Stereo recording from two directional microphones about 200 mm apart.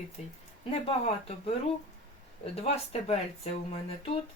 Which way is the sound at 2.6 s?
30° left (ahead or behind).